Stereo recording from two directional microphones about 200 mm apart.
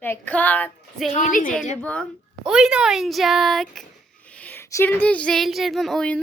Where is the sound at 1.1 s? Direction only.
40° left (ahead or behind).